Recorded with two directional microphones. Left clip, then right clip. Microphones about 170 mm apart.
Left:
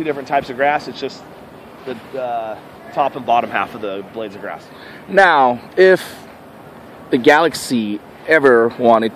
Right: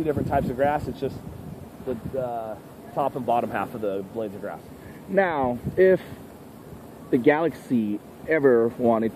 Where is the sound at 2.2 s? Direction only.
45° right (ahead or behind).